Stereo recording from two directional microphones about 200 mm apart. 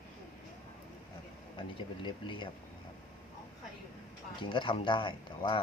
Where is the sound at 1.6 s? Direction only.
25° left (ahead or behind).